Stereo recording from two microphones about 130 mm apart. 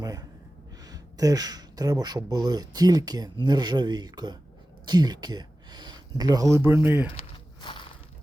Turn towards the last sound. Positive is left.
turn(degrees=40)  # may be behind; listen again after turning